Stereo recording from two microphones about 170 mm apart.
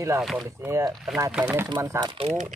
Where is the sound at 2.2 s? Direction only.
45° right (ahead or behind).